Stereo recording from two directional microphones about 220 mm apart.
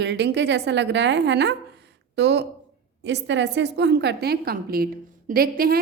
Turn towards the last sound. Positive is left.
turn(degrees=-40)  # may be behind; listen again after turning